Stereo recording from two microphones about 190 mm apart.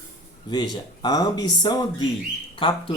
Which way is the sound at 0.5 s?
20° left (ahead or behind).